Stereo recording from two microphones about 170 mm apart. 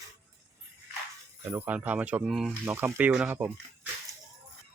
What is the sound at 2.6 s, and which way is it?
Speech, 15° right (ahead or behind).